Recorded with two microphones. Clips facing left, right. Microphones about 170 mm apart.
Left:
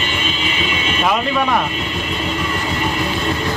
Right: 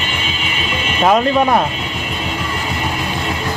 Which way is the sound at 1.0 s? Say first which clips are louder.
Right 6 dB; 35° right (ahead or behind).